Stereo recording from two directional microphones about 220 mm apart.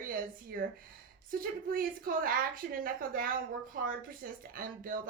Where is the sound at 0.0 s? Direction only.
40° right (ahead or behind).